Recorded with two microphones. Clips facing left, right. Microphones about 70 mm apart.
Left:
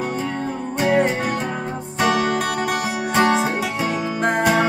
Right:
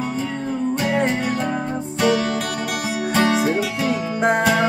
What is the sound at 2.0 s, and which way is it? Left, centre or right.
Music, left.